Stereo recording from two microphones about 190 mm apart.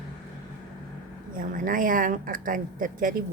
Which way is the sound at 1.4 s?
45° right (ahead or behind).